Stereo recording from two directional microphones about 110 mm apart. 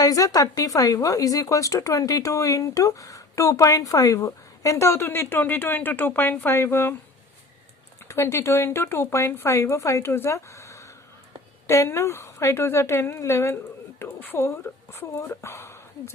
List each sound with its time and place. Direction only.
0.0 s speech: 30° left (ahead or behind)
8.0 s speech: 25° left (ahead or behind)